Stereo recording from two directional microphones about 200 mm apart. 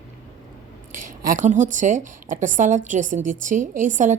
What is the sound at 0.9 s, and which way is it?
A woman's voice, 40° right (ahead or behind).